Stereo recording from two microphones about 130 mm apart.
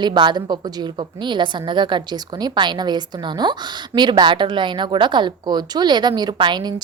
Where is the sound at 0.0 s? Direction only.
35° right (ahead or behind).